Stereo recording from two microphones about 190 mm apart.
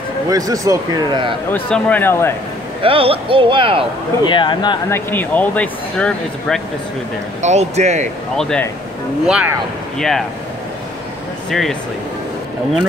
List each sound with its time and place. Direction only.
0.3 s speech: 20° right (ahead or behind)
1.5 s speech: 10° left (ahead or behind)
2.8 s speech: 30° right (ahead or behind)
4.2 s speech: 25° left (ahead or behind)
4.8 s speech: 10° left (ahead or behind)
7.4 s speech: 35° right (ahead or behind)
8.4 s speech: 5° left (ahead or behind)